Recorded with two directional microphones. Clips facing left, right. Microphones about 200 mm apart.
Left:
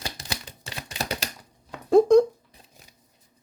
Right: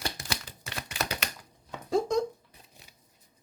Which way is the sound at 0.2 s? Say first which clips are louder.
Left 1 dB; 30° left (ahead or behind).